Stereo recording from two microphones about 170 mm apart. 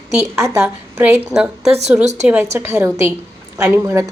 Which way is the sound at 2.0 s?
40° right (ahead or behind).